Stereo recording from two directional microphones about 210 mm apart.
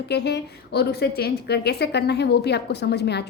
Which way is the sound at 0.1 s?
50° left (ahead or behind).